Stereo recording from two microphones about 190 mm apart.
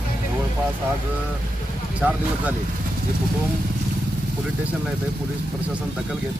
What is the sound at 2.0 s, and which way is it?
Speech, 5° right (ahead or behind).